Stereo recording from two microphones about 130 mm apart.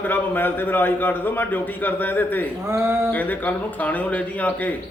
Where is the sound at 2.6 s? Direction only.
20° right (ahead or behind).